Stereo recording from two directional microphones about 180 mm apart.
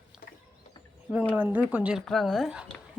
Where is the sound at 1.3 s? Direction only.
10° right (ahead or behind).